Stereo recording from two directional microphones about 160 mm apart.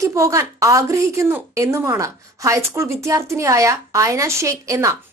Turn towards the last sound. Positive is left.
turn(degrees=-20)  # may be behind; listen again after turning